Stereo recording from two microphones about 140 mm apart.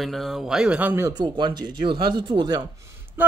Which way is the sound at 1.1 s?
35° right (ahead or behind).